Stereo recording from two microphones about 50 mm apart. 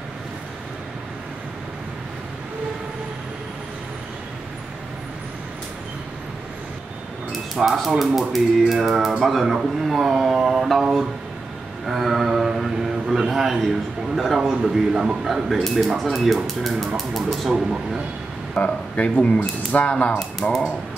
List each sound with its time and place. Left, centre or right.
7.5 s speech: centre
9.8 s a sound: centre
10.8 s speech: centre
11.8 s a sound: centre
14.1 s speech: centre
18.5 s speech: left
20.4 s speech: centre